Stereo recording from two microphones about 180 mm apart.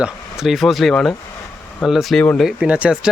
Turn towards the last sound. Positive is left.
turn(degrees=-5)  # may be behind; listen again after turning